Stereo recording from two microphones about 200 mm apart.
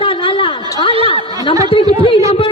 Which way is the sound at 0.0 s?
25° left (ahead or behind).